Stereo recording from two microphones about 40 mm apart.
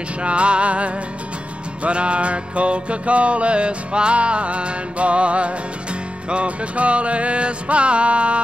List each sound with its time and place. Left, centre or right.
0.2 s music: right